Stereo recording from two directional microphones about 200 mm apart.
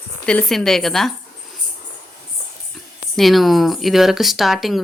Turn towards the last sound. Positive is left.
turn(degrees=0)  # may be behind; listen again after turning